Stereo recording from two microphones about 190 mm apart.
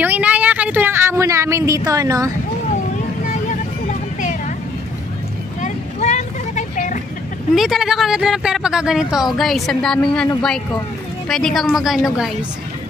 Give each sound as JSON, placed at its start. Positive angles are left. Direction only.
{"t": 0.0, "sound": "a sound", "side_deg": -10}
{"t": 5.6, "sound": "vehicle", "side_deg": 35}
{"t": 7.5, "sound": "speech", "side_deg": 0}